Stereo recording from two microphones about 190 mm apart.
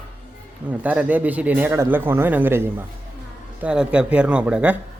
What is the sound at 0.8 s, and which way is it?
A man's voice, 10° right (ahead or behind).